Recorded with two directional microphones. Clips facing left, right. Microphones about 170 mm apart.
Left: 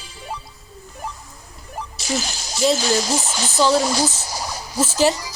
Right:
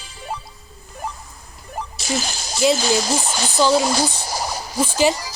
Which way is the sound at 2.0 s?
55° right (ahead or behind).